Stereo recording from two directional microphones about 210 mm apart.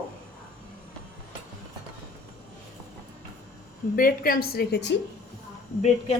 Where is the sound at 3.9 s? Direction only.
45° left (ahead or behind).